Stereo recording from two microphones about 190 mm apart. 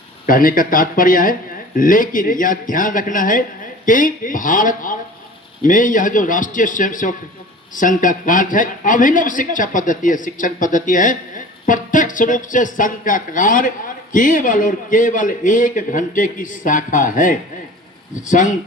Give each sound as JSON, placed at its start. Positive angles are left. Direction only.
{"t": 0.3, "sound": "speech", "side_deg": 45}